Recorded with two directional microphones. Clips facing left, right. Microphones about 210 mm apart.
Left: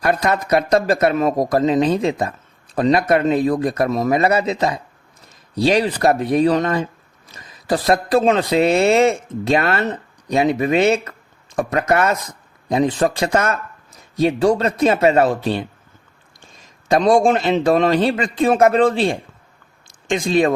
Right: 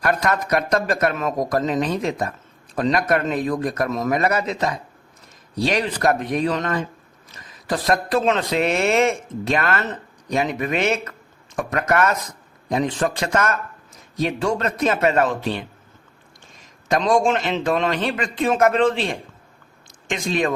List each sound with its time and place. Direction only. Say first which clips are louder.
0.0 s a man's voice: left 3 dB; 30° left (ahead or behind)
16.9 s a man's voice: left 4 dB; 35° left (ahead or behind)